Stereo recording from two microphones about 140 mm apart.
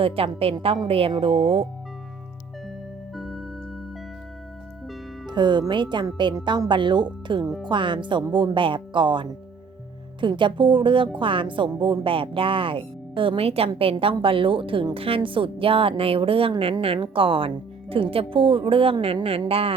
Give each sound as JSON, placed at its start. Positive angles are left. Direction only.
{"t": 0.0, "sound": "speech", "side_deg": -45}
{"t": 3.2, "sound": "music", "side_deg": 0}
{"t": 5.2, "sound": "speech", "side_deg": -30}